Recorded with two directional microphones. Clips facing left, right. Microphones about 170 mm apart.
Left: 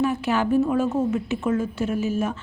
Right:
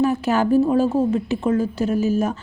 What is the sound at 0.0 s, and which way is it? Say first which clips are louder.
A woman's voice: right 4 dB; 40° right (ahead or behind).